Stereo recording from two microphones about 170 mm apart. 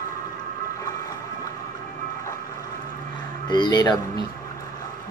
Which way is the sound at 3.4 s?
25° left (ahead or behind).